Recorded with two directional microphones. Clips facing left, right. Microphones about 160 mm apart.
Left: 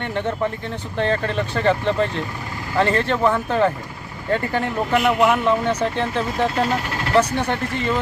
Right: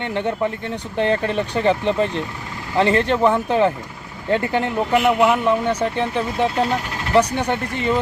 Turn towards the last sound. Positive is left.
turn(degrees=-15)  # may be behind; listen again after turning